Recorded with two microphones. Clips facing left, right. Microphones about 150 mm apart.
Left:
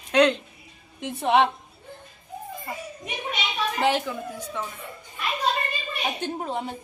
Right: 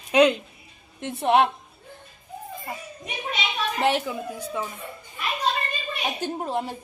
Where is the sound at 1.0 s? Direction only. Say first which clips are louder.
Right 1 dB; centre (ahead or behind).